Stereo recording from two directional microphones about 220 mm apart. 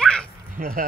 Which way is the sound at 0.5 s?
40° right (ahead or behind).